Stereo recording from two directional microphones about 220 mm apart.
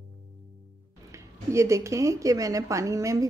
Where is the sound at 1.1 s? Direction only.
15° right (ahead or behind).